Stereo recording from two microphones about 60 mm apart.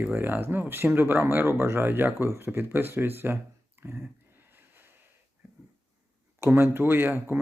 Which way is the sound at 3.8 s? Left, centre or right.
Right.